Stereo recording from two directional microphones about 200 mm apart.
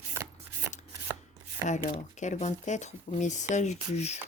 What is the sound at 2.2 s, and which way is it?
Speech, 35° left (ahead or behind).